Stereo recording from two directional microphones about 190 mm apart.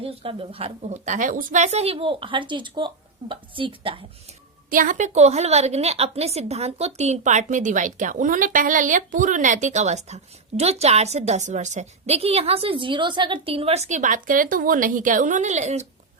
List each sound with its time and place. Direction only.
0.0 s a woman's voice: 30° right (ahead or behind)
4.7 s a woman's voice: 45° right (ahead or behind)